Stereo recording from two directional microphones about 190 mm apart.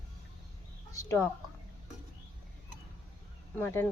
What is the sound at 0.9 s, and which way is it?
Speech, 15° left (ahead or behind).